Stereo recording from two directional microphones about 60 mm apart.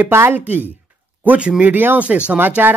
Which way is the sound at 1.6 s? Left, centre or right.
Right.